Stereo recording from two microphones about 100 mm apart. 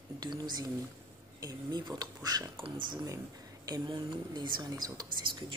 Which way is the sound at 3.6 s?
40° right (ahead or behind).